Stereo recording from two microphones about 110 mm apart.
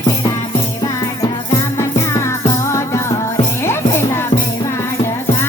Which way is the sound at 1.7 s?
25° left (ahead or behind).